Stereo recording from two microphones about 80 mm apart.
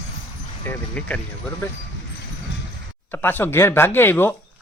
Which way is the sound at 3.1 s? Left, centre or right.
Left.